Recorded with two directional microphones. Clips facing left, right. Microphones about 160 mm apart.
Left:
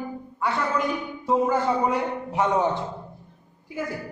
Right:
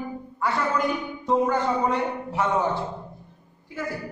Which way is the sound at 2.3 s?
15° left (ahead or behind).